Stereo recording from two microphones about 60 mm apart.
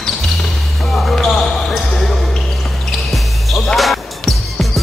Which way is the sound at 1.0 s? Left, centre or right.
Centre.